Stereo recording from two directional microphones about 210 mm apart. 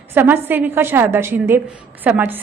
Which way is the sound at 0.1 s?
10° right (ahead or behind).